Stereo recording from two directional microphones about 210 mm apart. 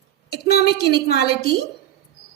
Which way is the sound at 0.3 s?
45° left (ahead or behind).